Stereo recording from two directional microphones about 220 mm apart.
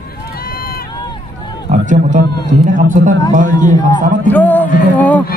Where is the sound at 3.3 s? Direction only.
35° right (ahead or behind).